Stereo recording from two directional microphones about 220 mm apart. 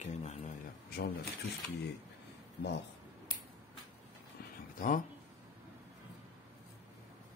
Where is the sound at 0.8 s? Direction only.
45° left (ahead or behind).